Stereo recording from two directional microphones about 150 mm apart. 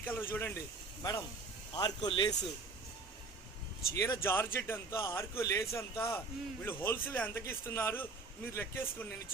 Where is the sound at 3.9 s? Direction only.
20° left (ahead or behind).